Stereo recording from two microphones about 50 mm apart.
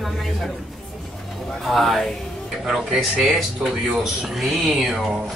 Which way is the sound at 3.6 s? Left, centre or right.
Centre.